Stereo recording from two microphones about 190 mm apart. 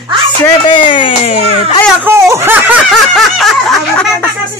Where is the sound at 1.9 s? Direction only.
10° right (ahead or behind); by 4.3 s 5° left (ahead or behind).